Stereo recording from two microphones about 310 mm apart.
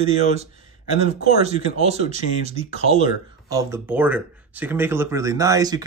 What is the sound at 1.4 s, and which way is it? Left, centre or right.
Speech, centre.